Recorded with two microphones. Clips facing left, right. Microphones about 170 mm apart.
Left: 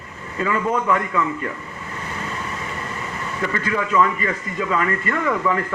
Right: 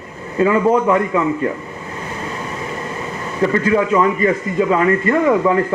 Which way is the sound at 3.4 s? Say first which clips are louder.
Right 9 dB; 30° right (ahead or behind).